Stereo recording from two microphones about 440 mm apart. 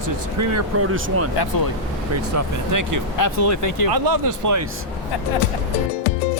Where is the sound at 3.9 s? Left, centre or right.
Right.